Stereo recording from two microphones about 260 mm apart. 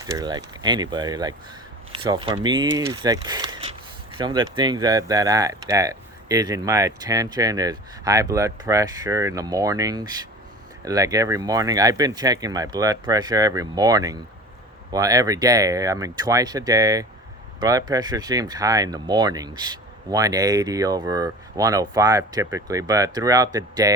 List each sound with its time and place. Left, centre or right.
0.0 s speech: centre